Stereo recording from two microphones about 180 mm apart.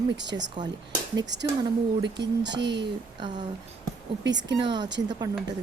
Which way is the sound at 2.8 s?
25° right (ahead or behind).